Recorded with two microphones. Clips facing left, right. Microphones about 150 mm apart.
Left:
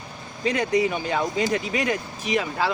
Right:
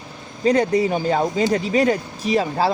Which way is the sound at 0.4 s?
35° right (ahead or behind).